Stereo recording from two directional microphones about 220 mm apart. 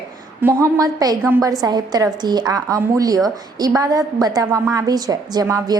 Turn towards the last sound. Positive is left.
turn(degrees=-15)  # may be behind; listen again after turning